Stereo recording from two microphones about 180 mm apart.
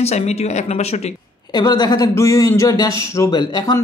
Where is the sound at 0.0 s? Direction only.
35° left (ahead or behind).